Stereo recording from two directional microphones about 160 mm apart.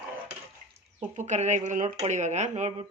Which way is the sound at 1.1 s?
50° right (ahead or behind).